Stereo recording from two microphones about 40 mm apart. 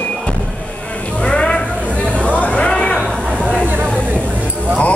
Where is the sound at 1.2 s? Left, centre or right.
Left.